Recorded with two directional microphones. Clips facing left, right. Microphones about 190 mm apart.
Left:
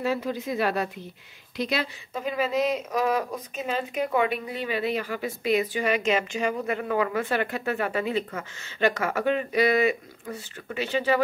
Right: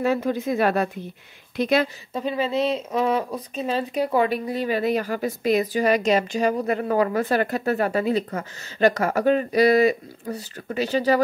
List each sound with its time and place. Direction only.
0.0 s speech: 50° right (ahead or behind)
2.1 s speech: 30° right (ahead or behind)